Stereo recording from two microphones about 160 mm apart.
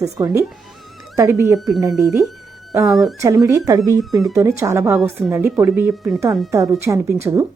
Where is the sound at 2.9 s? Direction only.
Centre (ahead or behind).